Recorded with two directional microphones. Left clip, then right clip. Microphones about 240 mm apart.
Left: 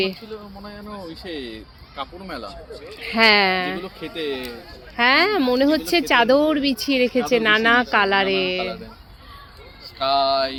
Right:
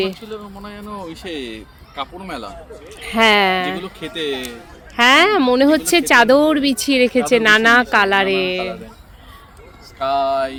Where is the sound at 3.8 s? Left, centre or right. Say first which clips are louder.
Right 4 dB; right.